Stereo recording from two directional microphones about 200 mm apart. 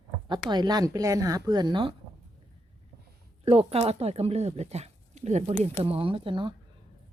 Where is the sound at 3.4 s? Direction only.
30° right (ahead or behind).